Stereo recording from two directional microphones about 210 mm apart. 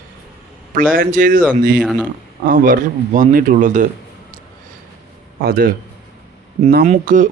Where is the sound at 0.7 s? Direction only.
40° right (ahead or behind).